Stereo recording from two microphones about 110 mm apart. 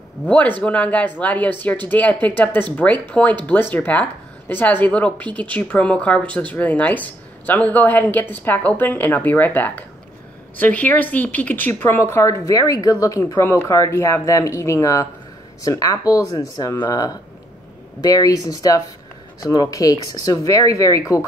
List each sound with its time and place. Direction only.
0.3 s a woman's voice: 10° left (ahead or behind); by 21.3 s 30° left (ahead or behind)